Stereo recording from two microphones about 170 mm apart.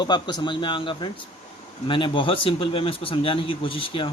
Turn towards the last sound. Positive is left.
turn(degrees=30)  # may be behind; listen again after turning